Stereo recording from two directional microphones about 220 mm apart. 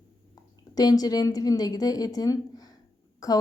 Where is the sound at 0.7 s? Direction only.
15° left (ahead or behind).